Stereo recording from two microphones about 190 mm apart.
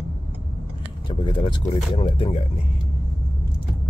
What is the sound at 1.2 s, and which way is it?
Speech, 25° left (ahead or behind).